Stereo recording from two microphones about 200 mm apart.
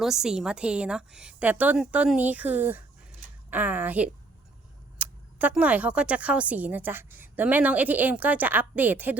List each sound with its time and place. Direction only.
0.0 s a woman's voice: centre (ahead or behind)